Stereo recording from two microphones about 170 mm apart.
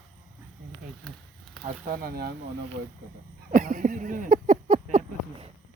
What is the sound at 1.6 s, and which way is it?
Speech, 55° right (ahead or behind).